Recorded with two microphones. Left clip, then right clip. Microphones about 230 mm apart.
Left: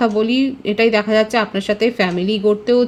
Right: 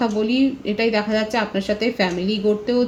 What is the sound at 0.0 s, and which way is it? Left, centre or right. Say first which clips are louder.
A woman's voice: left 3 dB; left.